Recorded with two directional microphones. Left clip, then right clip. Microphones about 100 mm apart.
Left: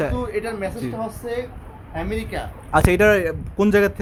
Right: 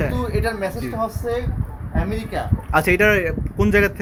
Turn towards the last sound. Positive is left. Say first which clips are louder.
# even
turn(degrees=25)  # may be behind; listen again after turning